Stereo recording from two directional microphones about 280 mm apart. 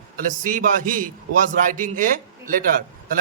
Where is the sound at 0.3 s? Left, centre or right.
Right.